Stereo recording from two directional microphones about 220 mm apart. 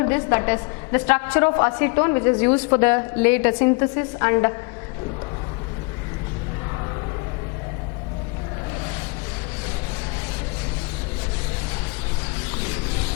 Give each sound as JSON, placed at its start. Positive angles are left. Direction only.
{"t": 0.0, "sound": "a woman's voice", "side_deg": 15}